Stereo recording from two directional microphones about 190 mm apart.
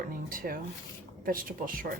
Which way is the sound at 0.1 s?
50° right (ahead or behind).